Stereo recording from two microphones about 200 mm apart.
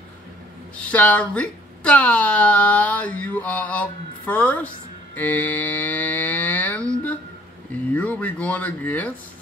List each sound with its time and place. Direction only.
0.7 s speech: 5° left (ahead or behind)